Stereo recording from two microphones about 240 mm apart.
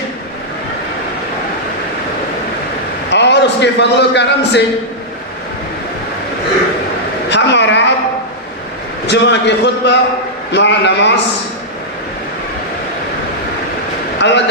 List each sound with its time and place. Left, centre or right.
3.1 s a man's voice: left
7.3 s a sound: left
9.0 s a man's voice: left
14.2 s a man's voice: left